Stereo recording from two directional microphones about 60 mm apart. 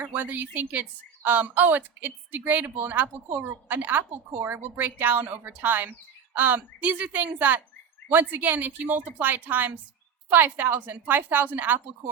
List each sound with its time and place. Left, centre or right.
0.0 s a woman's voice: right